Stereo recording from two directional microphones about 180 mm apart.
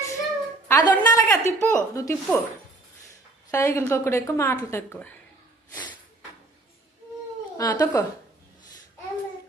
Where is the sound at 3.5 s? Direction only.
15° left (ahead or behind).